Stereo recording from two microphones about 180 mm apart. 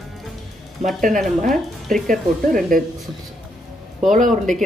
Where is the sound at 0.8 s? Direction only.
40° right (ahead or behind).